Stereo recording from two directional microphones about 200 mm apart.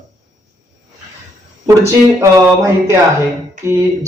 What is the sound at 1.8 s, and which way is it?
Speech, 15° right (ahead or behind).